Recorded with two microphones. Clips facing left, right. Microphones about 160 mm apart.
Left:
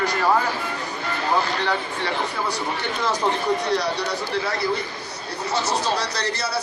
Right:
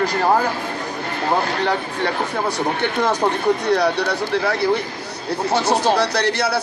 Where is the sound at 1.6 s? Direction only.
55° right (ahead or behind).